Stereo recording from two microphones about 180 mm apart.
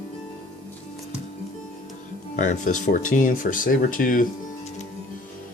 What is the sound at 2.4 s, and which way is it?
Speech, 45° left (ahead or behind).